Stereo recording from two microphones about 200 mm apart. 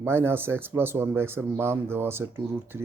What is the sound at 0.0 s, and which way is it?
Speech, 10° right (ahead or behind).